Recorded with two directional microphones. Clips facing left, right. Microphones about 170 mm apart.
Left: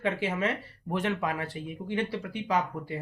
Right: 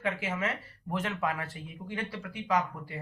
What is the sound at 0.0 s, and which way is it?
Speech, 30° left (ahead or behind).